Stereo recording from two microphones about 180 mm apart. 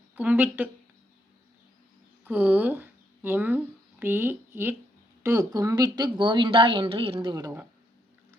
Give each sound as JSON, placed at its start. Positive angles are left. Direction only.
{"t": 0.2, "sound": "speech", "side_deg": -10}
{"t": 2.2, "sound": "speech", "side_deg": -10}